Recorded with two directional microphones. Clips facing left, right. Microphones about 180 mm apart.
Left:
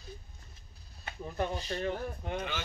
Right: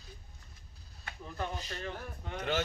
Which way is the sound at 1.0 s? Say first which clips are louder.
Left 5 dB; 20° left (ahead or behind).